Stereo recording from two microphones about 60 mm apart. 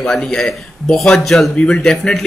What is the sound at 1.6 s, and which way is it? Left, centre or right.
Speech, centre.